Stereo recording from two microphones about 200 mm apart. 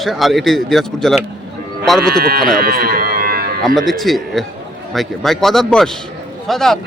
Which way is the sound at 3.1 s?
50° right (ahead or behind).